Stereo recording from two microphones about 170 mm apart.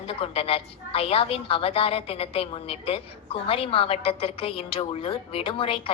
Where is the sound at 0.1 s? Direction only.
35° left (ahead or behind).